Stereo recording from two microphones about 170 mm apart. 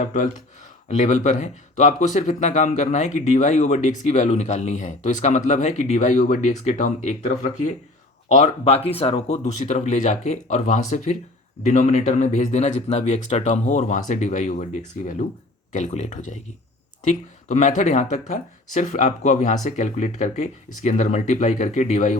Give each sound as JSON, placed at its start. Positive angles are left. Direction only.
{"t": 0.0, "sound": "speech", "side_deg": 45}